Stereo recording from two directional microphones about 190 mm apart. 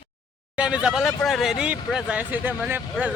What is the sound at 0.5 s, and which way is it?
Speech, 5° right (ahead or behind).